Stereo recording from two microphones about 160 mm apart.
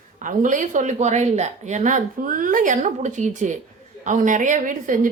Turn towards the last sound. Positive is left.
turn(degrees=-55)  # may be behind; listen again after turning